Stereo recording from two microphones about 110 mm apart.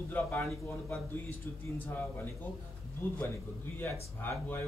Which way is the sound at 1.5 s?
20° left (ahead or behind).